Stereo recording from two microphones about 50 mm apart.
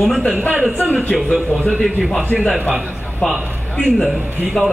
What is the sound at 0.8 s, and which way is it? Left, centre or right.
Speech, left.